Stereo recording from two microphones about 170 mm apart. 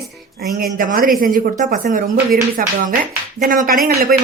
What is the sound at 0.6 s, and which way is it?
Speech, 55° right (ahead or behind).